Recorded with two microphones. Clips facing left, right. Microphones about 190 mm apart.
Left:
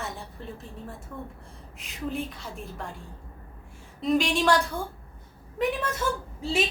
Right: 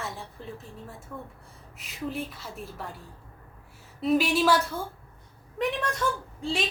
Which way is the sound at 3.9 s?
5° right (ahead or behind).